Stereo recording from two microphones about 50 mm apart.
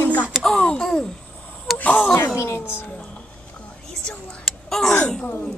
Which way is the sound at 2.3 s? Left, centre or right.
Left.